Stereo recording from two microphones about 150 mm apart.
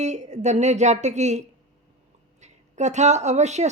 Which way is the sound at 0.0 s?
50° right (ahead or behind).